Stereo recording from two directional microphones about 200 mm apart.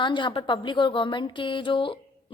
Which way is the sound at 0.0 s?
25° left (ahead or behind).